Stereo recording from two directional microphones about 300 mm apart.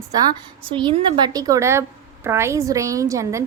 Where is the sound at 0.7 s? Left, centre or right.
Centre.